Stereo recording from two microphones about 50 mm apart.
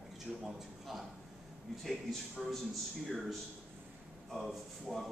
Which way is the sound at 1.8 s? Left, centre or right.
Centre.